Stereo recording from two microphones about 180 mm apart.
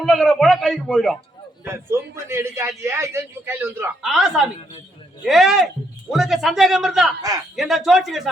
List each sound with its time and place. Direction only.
0.0 s speech: centre (ahead or behind)
1.6 s a man's voice: 15° right (ahead or behind)
4.0 s speech: centre (ahead or behind)
7.2 s speech: 20° right (ahead or behind)
7.5 s speech: centre (ahead or behind)